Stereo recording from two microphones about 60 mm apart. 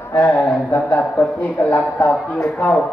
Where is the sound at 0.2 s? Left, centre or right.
Left.